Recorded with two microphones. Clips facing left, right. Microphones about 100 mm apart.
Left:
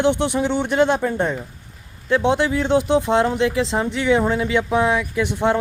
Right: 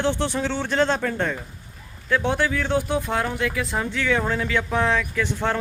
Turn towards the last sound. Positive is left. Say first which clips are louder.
# left 5 dB
turn(degrees=20)  # may be behind; listen again after turning